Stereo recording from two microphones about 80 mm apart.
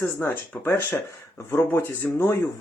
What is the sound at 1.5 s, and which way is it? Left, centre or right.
Speech, left.